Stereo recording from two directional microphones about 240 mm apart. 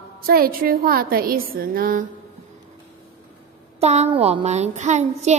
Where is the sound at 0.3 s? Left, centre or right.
Right.